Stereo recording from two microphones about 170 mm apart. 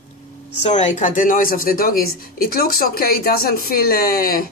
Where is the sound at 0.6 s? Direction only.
45° left (ahead or behind).